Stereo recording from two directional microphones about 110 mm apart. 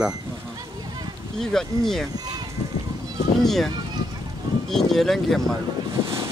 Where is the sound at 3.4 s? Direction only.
Centre (ahead or behind).